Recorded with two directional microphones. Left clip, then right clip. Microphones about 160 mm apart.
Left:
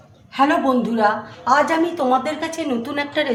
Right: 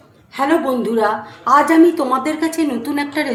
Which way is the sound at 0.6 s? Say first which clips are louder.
Right 1 dB; 10° right (ahead or behind).